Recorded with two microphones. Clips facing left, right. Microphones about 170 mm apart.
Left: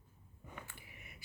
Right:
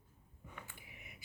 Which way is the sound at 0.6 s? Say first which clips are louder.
Even; 15° right (ahead or behind).